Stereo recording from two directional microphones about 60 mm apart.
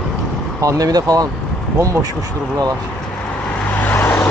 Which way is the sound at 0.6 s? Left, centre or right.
Right.